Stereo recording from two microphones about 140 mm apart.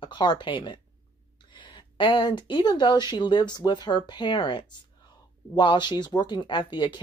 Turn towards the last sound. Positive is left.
turn(degrees=35)  # may be behind; listen again after turning